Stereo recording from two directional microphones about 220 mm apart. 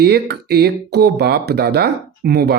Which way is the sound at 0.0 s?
45° right (ahead or behind).